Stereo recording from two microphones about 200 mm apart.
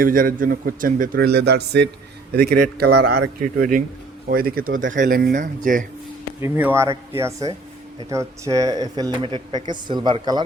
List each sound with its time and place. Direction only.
0.0 s speech: 45° right (ahead or behind)
6.4 s speech: 10° right (ahead or behind)